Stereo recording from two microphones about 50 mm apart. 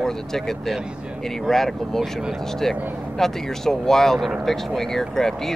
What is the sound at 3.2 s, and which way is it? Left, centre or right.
Speech, centre.